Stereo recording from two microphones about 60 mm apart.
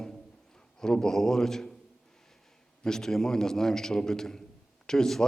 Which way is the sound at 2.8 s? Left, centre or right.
Centre.